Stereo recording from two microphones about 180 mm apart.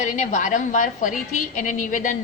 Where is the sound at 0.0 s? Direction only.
45° left (ahead or behind).